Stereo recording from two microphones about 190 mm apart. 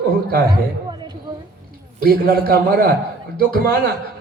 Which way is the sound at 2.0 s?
55° right (ahead or behind).